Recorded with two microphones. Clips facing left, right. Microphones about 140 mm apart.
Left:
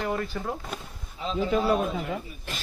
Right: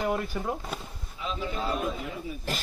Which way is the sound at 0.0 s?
10° right (ahead or behind).